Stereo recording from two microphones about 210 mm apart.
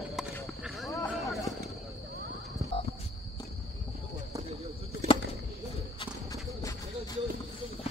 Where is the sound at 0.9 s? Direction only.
15° left (ahead or behind).